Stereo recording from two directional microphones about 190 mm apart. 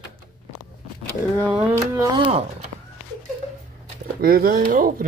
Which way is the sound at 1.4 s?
10° right (ahead or behind).